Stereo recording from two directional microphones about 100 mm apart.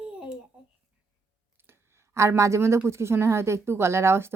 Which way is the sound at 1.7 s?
25° right (ahead or behind).